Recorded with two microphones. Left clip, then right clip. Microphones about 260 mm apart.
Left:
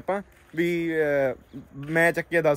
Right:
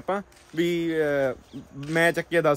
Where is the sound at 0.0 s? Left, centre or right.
Centre.